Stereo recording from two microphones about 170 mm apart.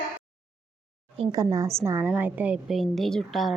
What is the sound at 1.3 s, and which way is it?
A woman's voice, 20° right (ahead or behind).